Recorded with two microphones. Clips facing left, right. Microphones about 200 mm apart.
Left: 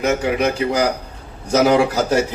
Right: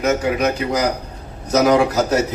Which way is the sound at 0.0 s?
30° left (ahead or behind).